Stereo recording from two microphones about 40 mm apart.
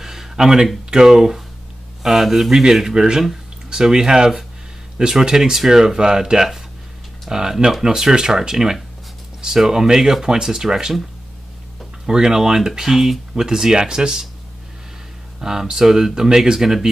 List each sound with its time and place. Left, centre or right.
0.0 s a sound: centre
0.8 s speech: centre
12.1 s speech: centre
15.4 s speech: centre